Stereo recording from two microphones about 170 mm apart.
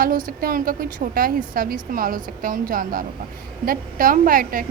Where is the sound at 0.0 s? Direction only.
55° right (ahead or behind).